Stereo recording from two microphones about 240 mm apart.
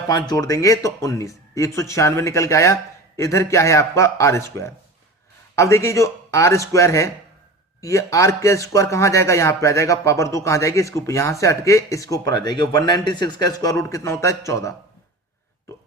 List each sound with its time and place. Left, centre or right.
0.3 s speech: centre